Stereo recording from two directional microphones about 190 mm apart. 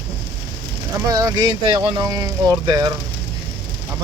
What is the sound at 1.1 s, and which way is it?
Speech, 20° right (ahead or behind).